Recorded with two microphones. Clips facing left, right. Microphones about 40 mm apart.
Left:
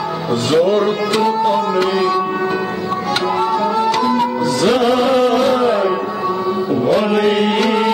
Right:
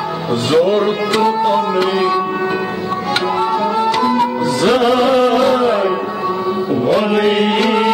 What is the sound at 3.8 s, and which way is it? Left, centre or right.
Music, centre.